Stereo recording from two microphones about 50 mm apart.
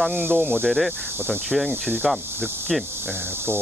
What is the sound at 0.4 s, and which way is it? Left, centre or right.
Speech, centre.